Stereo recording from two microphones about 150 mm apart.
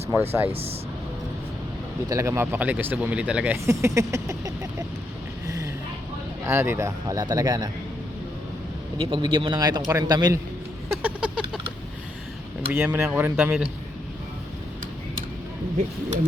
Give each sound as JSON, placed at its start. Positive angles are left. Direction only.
{"t": 0.1, "sound": "speech", "side_deg": -15}
{"t": 2.0, "sound": "speech", "side_deg": -20}
{"t": 3.7, "sound": "speech", "side_deg": -20}
{"t": 6.4, "sound": "speech", "side_deg": -15}
{"t": 9.0, "sound": "speech", "side_deg": -35}
{"t": 11.0, "sound": "speech", "side_deg": -10}
{"t": 12.7, "sound": "speech", "side_deg": -10}